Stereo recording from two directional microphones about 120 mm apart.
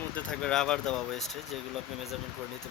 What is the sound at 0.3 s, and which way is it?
Speech, 5° left (ahead or behind).